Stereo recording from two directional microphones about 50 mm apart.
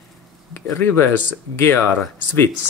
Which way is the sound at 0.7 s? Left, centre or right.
Left.